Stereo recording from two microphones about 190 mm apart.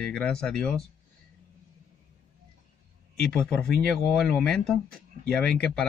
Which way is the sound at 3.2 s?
5° left (ahead or behind).